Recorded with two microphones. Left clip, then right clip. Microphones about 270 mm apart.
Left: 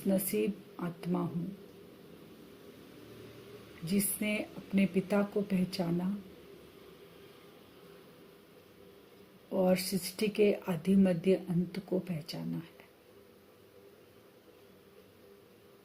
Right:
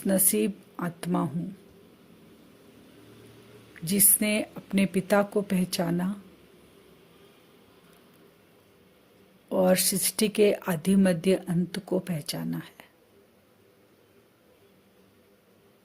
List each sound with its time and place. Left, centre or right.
0.1 s speech: right
3.8 s speech: right
9.5 s speech: right